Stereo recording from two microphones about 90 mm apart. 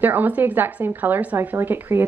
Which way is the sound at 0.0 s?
20° right (ahead or behind).